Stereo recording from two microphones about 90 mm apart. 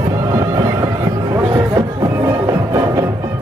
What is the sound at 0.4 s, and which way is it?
Music, 50° right (ahead or behind).